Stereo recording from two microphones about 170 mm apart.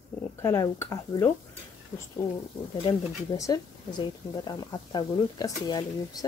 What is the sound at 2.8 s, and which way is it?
Speech, 25° left (ahead or behind).